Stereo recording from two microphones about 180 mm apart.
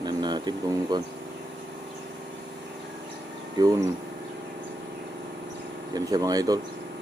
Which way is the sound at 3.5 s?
20° right (ahead or behind).